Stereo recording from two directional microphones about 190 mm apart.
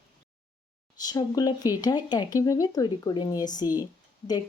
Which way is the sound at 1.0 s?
20° left (ahead or behind).